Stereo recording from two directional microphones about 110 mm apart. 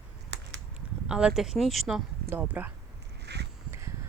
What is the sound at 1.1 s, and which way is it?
Speech, 10° right (ahead or behind).